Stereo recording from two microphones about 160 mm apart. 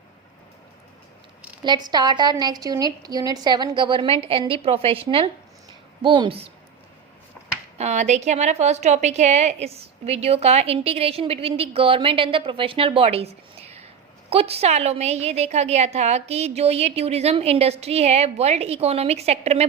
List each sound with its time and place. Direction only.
1.6 s a woman's voice: 25° right (ahead or behind)
7.8 s a woman's voice: 45° right (ahead or behind)